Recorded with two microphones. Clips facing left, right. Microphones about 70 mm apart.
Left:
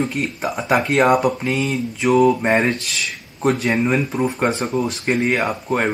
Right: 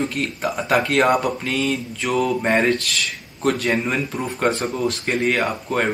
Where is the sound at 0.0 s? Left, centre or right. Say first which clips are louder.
Left 1 dB; centre.